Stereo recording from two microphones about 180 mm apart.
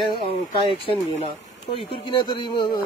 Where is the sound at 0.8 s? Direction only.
30° left (ahead or behind).